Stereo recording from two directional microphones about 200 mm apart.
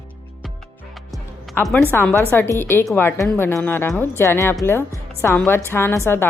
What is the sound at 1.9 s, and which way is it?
A woman's voice, 10° left (ahead or behind).